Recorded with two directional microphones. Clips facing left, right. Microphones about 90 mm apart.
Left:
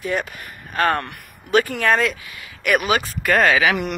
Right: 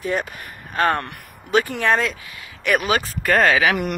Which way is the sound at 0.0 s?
30° right (ahead or behind).